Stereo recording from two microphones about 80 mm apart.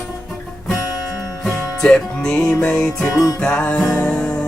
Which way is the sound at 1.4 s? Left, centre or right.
Centre.